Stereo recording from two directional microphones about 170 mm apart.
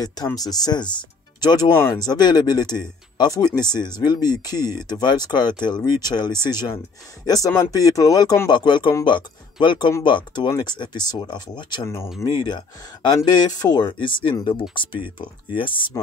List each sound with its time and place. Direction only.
0.0 s speech: 20° left (ahead or behind)
1.7 s speech: 15° left (ahead or behind); by 15.9 s 30° left (ahead or behind)